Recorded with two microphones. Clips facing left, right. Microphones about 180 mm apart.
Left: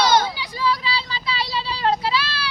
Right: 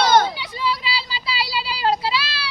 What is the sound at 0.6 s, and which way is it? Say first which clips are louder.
Child singing: left 2 dB; 30° right (ahead or behind).